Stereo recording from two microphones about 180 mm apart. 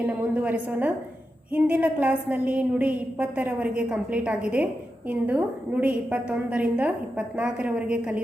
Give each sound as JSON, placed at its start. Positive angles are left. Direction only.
{"t": 0.0, "sound": "a woman's voice", "side_deg": -10}